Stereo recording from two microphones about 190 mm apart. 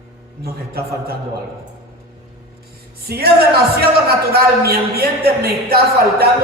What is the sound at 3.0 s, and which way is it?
Speech, 55° right (ahead or behind).